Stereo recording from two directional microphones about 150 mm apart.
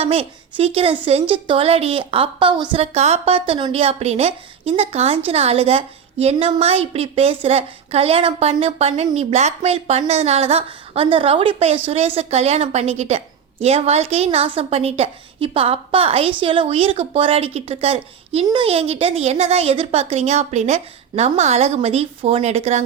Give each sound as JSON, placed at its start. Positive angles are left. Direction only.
{"t": 0.0, "sound": "a woman's voice", "side_deg": -40}
{"t": 2.9, "sound": "a woman's voice", "side_deg": -45}